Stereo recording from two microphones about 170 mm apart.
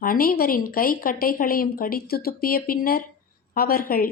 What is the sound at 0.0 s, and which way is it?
Speech, 60° left (ahead or behind).